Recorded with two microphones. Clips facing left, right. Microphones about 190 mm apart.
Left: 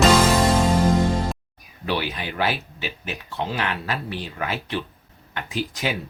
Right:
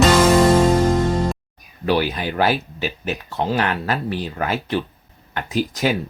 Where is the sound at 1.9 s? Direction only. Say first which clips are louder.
Right 7 dB; 40° right (ahead or behind).